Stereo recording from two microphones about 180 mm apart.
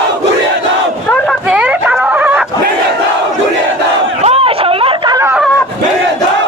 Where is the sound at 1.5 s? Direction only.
5° right (ahead or behind).